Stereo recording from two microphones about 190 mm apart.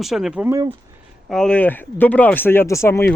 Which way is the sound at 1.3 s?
5° left (ahead or behind).